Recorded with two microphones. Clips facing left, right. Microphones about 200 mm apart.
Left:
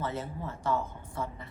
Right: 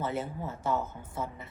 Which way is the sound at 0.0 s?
25° right (ahead or behind).